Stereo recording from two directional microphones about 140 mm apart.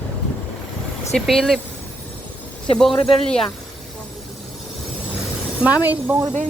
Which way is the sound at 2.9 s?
35° left (ahead or behind).